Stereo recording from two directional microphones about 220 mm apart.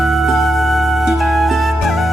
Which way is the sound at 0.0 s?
Centre (ahead or behind).